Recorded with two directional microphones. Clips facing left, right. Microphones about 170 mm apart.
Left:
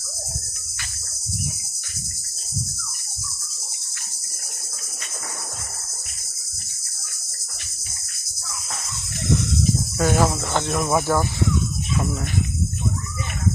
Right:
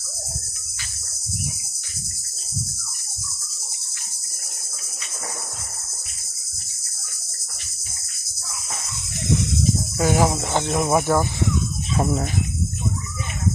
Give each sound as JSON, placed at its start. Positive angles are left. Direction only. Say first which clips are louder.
{"t": 10.0, "sound": "cricket", "louder": "right 1 dB", "side_deg": -15}